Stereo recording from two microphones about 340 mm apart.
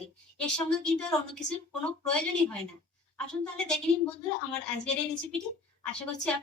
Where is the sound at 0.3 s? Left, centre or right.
Centre.